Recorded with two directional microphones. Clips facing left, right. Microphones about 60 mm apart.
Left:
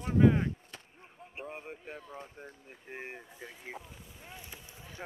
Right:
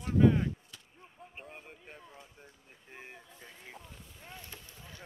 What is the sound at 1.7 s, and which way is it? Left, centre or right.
Speech, centre.